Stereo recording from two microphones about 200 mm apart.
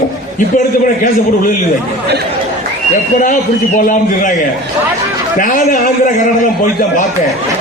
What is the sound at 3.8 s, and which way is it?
Speech, 40° left (ahead or behind).